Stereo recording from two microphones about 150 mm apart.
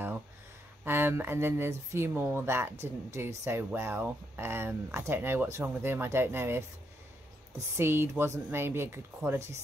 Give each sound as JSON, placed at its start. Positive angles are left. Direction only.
{"t": 0.8, "sound": "speech", "side_deg": -15}
{"t": 7.7, "sound": "speech", "side_deg": -15}